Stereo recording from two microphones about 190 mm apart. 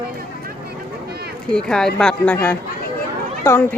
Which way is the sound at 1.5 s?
5° left (ahead or behind).